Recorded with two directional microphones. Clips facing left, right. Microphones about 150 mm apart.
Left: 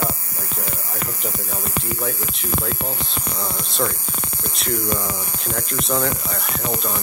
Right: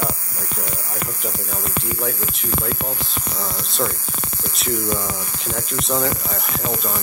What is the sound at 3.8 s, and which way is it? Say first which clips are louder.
Speech: even; 5° right (ahead or behind).